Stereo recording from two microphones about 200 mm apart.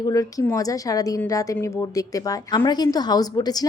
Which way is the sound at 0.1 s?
15° left (ahead or behind).